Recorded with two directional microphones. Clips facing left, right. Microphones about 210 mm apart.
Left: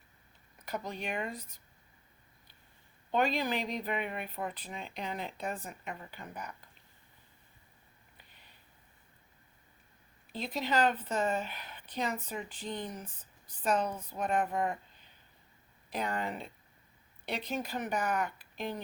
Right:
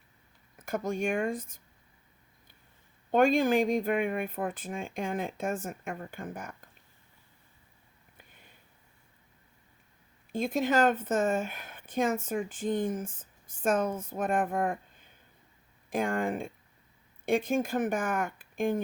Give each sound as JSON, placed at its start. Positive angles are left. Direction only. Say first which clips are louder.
{"t": 0.6, "sound": "a woman's voice", "louder": "right 8 dB", "side_deg": -50}
{"t": 3.1, "sound": "a woman's voice", "louder": "right 7 dB", "side_deg": -50}
{"t": 8.2, "sound": "a sound", "louder": "right 6 dB", "side_deg": -50}
{"t": 10.3, "sound": "a woman's voice", "louder": "right 6 dB", "side_deg": -50}